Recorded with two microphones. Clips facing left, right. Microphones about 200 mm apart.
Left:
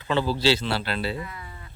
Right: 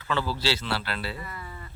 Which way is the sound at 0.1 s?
20° left (ahead or behind).